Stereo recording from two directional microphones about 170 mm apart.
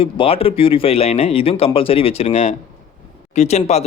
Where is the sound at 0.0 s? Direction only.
35° left (ahead or behind).